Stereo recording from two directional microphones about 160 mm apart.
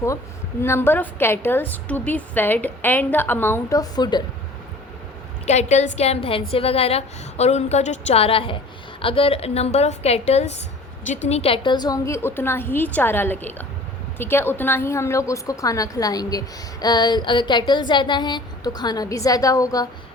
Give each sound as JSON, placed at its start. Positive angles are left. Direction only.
{"t": 0.6, "sound": "a woman's voice", "side_deg": 15}
{"t": 5.5, "sound": "a woman's voice", "side_deg": 45}
{"t": 16.8, "sound": "a sound", "side_deg": 25}